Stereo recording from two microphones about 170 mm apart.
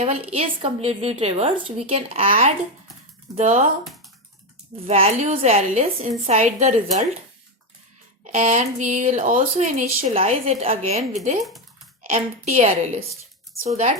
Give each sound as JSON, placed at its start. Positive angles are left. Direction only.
{"t": 0.0, "sound": "a woman's voice", "side_deg": -40}
{"t": 2.1, "sound": "speech", "side_deg": -55}
{"t": 4.9, "sound": "a woman's voice", "side_deg": -40}
{"t": 8.3, "sound": "a woman's voice", "side_deg": -45}